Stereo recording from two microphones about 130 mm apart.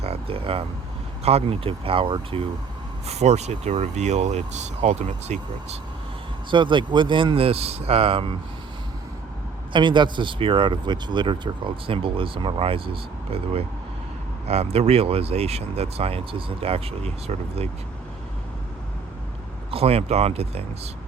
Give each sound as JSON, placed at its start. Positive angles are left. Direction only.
{"t": 0.0, "sound": "a sound", "side_deg": -50}
{"t": 1.2, "sound": "speech", "side_deg": -50}
{"t": 3.1, "sound": "speech", "side_deg": -55}
{"t": 6.5, "sound": "speech", "side_deg": -40}
{"t": 9.7, "sound": "speech", "side_deg": -35}
{"t": 19.7, "sound": "speech", "side_deg": -50}